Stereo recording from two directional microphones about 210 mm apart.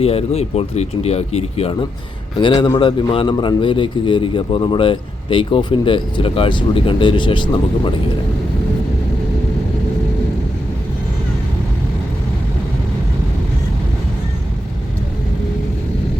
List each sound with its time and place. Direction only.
0.0 s a man's voice: 30° left (ahead or behind)